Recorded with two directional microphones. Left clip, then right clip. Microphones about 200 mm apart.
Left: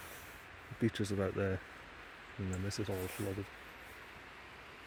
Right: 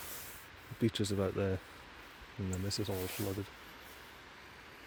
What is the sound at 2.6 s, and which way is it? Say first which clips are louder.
Speech: right 3 dB; 45° right (ahead or behind).